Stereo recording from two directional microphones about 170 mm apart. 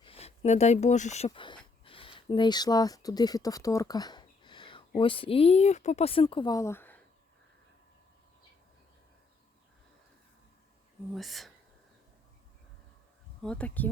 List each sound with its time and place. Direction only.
0.0 s speech: 35° left (ahead or behind)
1.4 s a sound: 30° left (ahead or behind)
4.9 s speech: 30° left (ahead or behind); by 7.0 s 10° left (ahead or behind)
11.1 s speech: centre (ahead or behind)
13.4 s speech: 5° left (ahead or behind)